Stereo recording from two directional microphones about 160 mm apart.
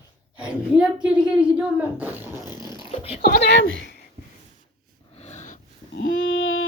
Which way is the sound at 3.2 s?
80° left.